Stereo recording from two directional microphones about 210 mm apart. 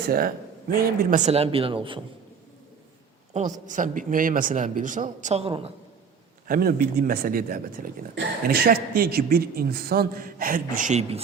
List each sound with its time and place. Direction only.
0.1 s a man's voice: 45° right (ahead or behind); by 2.0 s 25° right (ahead or behind)
3.3 s a woman's voice: 35° right (ahead or behind)
6.5 s speech: 45° right (ahead or behind)